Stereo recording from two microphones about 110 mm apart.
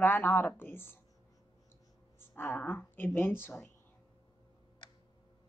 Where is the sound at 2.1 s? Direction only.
20° left (ahead or behind).